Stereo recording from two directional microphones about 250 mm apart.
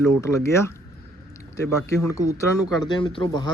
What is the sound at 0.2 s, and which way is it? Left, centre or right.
Speech, centre.